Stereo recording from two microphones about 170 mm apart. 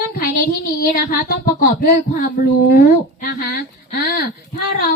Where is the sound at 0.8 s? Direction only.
60° left (ahead or behind).